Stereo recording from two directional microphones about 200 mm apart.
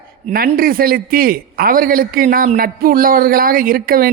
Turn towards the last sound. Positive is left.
turn(degrees=-45)  # may be behind; listen again after turning